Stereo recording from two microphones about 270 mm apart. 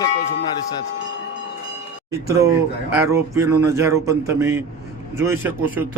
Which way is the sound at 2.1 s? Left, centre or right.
Centre.